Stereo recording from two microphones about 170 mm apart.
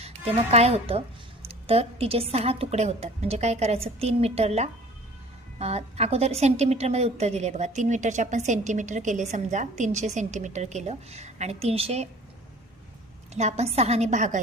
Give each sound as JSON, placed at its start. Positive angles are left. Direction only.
{"t": 0.0, "sound": "a woman's voice", "side_deg": -40}
{"t": 13.3, "sound": "a woman's voice", "side_deg": -40}